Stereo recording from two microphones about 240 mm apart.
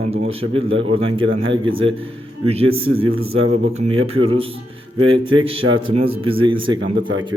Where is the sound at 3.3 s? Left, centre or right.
Right.